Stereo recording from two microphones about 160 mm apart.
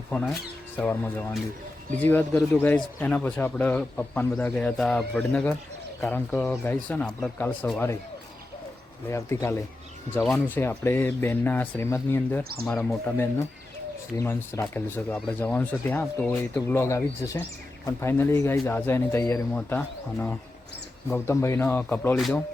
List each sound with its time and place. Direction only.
0.8 s speech: 10° left (ahead or behind)
9.0 s speech: 15° left (ahead or behind)
10.2 s speech: 5° left (ahead or behind)